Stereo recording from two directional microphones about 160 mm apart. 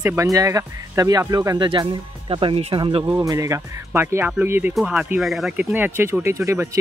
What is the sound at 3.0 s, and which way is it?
Speech, 20° right (ahead or behind).